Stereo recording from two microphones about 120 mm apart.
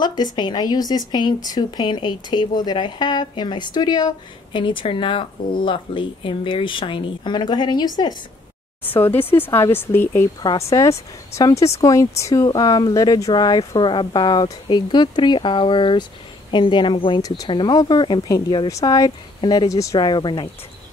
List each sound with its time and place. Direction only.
0.0 s speech: 35° left (ahead or behind)
9.2 s speech: 20° left (ahead or behind)
11.8 s speech: 25° left (ahead or behind)
18.7 s speech: 30° left (ahead or behind)
19.7 s speech: 30° left (ahead or behind)